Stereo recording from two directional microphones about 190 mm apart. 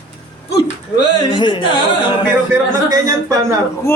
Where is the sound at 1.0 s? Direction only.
25° left (ahead or behind).